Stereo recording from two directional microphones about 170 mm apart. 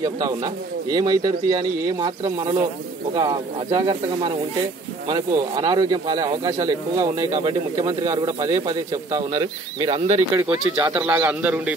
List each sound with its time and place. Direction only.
0.0 s speech: 20° right (ahead or behind)
9.8 s speech: 35° right (ahead or behind)
10.3 s a man's voice: 20° right (ahead or behind)